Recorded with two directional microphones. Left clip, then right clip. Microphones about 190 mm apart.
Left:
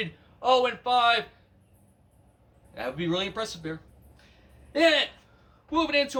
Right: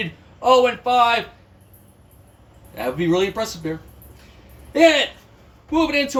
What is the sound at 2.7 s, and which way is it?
Speech, centre (ahead or behind).